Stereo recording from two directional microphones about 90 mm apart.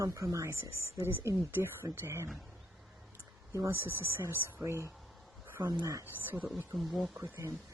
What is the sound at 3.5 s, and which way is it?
Speech, 30° right (ahead or behind).